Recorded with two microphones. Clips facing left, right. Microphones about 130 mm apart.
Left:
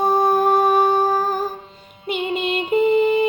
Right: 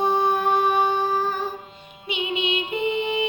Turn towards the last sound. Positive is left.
turn(degrees=45)  # may be behind; listen again after turning